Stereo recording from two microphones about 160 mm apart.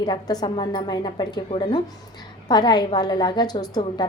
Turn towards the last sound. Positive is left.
turn(degrees=25)  # may be behind; listen again after turning